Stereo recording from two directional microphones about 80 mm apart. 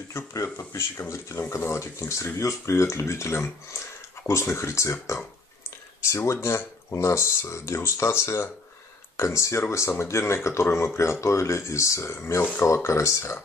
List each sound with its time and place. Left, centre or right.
0.1 s speech: left
6.0 s speech: left